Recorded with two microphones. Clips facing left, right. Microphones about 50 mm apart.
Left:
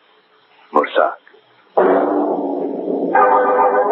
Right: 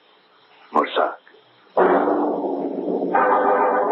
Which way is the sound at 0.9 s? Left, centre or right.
Centre.